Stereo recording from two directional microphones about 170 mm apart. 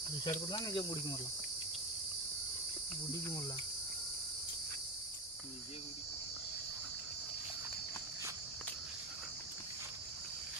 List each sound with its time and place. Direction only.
0.3 s cricket: 25° left (ahead or behind)